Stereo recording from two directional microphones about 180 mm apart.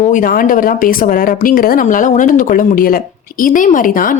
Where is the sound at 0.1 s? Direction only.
50° left (ahead or behind).